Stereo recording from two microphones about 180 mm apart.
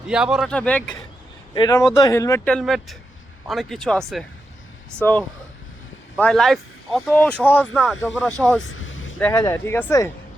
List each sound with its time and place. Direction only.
0.1 s speech: 5° right (ahead or behind)
0.5 s speech: 10° left (ahead or behind)
1.5 s speech: 20° left (ahead or behind); by 4.3 s 5° left (ahead or behind)
4.9 s speech: 15° right (ahead or behind)
6.1 s speech: 5° left (ahead or behind)
8.7 s vehicle: 90° left
9.3 s speech: 15° left (ahead or behind)